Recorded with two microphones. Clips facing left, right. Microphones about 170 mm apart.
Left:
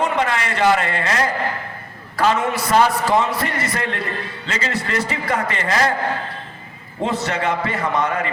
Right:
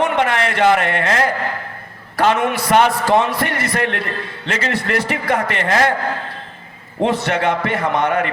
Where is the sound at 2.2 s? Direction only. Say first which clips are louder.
Right 2 dB; 60° right (ahead or behind).